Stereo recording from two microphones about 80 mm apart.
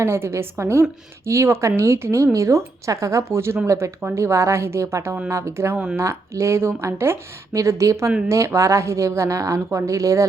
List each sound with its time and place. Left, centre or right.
0.0 s a woman's voice: right
5.7 s speech: centre
6.0 s a woman's voice: right